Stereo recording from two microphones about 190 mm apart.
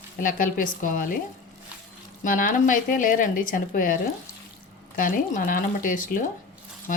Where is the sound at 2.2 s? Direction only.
45° left (ahead or behind).